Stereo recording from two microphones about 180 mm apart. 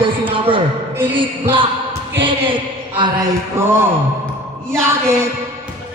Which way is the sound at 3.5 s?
15° right (ahead or behind).